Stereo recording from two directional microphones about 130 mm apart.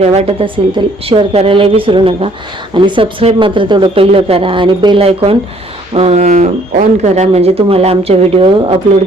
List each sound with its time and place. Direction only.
0.0 s a woman's voice: 60° right (ahead or behind)
0.8 s speech: 35° right (ahead or behind)